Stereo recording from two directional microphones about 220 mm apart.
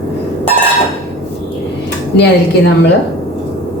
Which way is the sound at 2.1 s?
50° left (ahead or behind).